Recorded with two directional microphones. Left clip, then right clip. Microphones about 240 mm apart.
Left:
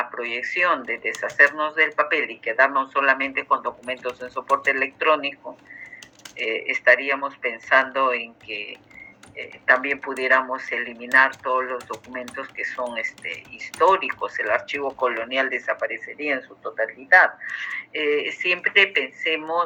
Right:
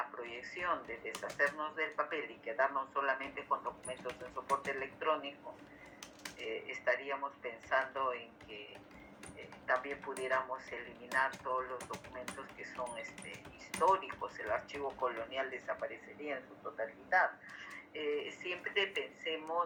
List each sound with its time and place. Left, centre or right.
0.0 s speech: left
6.3 s speech: left